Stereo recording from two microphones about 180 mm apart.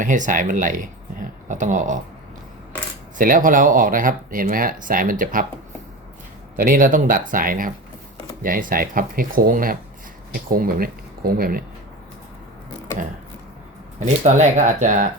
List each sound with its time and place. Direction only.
0.0 s speech: 45° right (ahead or behind)
3.2 s speech: 50° right (ahead or behind)
6.6 s speech: 50° right (ahead or behind)
14.0 s speech: 45° right (ahead or behind)